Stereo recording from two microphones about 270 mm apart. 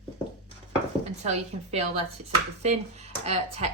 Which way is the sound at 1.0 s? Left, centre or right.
Right.